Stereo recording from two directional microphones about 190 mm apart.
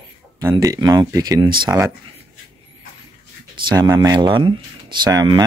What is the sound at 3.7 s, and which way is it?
Speech, 20° right (ahead or behind).